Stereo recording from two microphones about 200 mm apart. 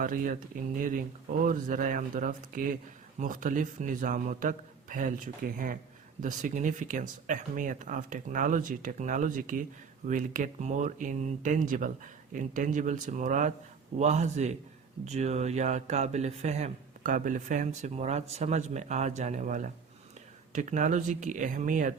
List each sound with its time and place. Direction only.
0.0 s speech: 45° right (ahead or behind)